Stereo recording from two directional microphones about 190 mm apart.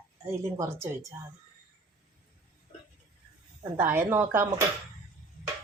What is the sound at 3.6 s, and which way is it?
Speech, 10° right (ahead or behind).